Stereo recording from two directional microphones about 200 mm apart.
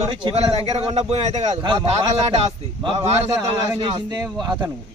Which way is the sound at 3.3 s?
20° right (ahead or behind).